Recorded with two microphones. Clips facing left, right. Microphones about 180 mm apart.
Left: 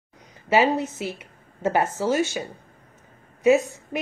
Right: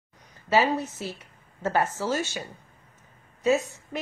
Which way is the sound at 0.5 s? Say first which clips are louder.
Left 3 dB; 15° left (ahead or behind).